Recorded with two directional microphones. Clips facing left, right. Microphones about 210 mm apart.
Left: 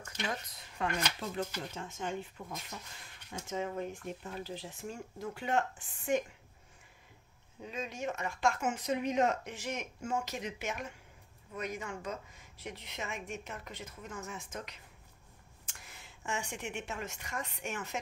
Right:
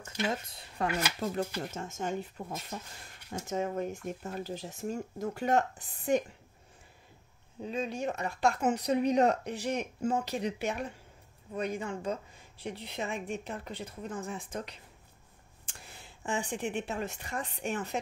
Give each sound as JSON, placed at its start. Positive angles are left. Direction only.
{"t": 0.0, "sound": "speech", "side_deg": -25}
{"t": 1.6, "sound": "speech", "side_deg": -45}
{"t": 7.6, "sound": "speech", "side_deg": -30}